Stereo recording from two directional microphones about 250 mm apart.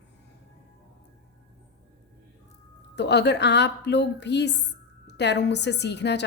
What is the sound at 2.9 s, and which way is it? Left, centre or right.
A woman's voice, left.